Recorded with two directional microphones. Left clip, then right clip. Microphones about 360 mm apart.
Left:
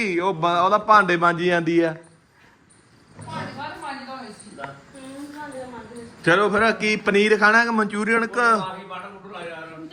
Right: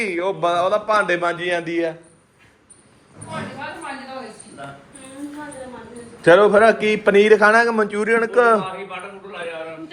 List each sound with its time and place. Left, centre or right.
0.0 s a man's voice: centre
6.2 s a man's voice: centre